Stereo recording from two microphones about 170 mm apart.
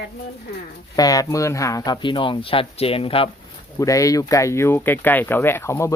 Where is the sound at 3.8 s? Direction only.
20° left (ahead or behind).